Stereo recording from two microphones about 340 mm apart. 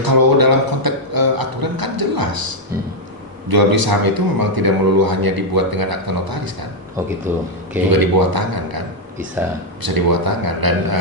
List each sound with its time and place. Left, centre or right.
0.0 s a sound: right
3.5 s speech: right
7.9 s speech: right
9.8 s speech: right